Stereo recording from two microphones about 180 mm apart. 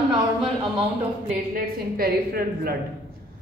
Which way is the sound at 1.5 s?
55° right (ahead or behind).